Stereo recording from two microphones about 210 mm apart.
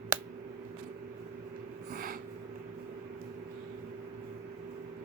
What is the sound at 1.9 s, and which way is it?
Snort, 45° right (ahead or behind).